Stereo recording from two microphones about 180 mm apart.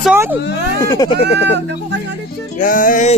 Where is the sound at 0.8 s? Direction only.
20° left (ahead or behind).